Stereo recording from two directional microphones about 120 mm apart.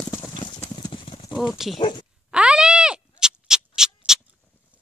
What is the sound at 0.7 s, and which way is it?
Clip-clop, 45° left (ahead or behind).